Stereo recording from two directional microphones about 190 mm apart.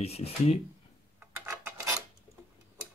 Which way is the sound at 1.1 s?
15° right (ahead or behind).